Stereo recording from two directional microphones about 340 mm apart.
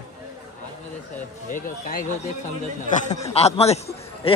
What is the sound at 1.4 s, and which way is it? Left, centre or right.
Speech, left.